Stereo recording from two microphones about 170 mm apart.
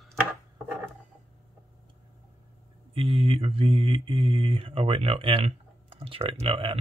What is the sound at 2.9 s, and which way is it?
Speech, 35° right (ahead or behind).